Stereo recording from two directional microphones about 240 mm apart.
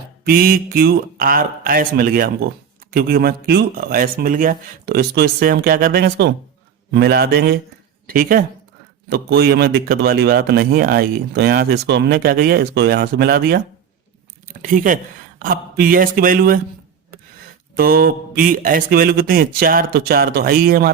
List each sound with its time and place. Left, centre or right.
0.3 s a man's voice: right
17.1 s a sound: right
17.7 s a man's voice: right